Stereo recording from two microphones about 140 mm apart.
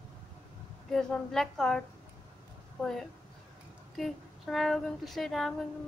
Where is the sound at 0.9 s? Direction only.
5° left (ahead or behind).